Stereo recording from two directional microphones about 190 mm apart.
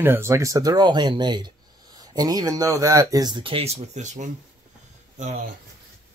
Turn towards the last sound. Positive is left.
turn(degrees=-40)  # may be behind; listen again after turning